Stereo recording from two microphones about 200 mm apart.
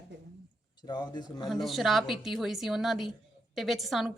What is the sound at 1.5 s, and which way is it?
A woman's voice, centre (ahead or behind).